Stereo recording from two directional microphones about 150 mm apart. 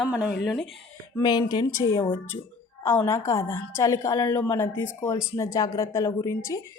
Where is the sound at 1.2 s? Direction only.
30° left (ahead or behind).